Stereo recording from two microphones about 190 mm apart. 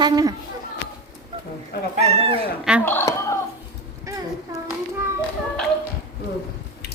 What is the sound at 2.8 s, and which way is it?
Speech, 10° left (ahead or behind).